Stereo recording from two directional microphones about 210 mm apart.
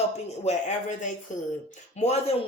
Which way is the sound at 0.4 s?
35° left (ahead or behind).